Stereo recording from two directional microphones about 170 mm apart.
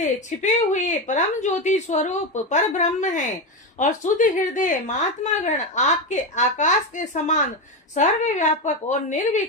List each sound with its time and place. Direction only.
0.0 s a woman's voice: 45° left (ahead or behind)